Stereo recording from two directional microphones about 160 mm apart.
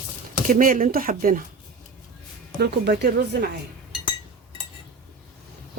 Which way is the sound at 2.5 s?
90° right.